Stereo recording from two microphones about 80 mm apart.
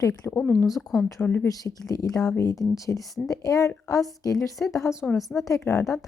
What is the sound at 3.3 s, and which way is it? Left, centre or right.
A woman's voice, left.